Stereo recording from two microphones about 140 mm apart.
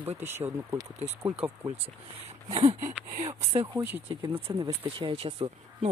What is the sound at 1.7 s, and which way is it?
Speech, 50° right (ahead or behind).